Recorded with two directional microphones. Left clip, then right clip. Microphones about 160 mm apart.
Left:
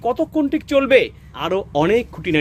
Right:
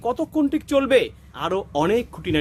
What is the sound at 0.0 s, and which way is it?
Speech, 10° right (ahead or behind).